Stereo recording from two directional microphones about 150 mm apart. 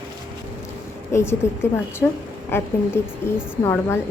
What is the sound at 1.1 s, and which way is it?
A woman's voice, 15° left (ahead or behind).